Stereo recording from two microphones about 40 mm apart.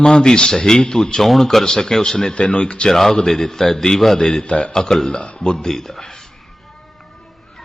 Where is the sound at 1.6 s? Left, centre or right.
Centre.